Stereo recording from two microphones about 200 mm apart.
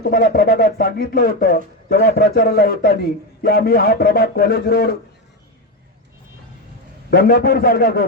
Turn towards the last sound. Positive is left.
turn(degrees=50)  # may be behind; listen again after turning